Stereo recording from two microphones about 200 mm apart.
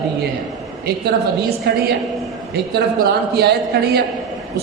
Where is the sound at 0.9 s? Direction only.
55° right (ahead or behind).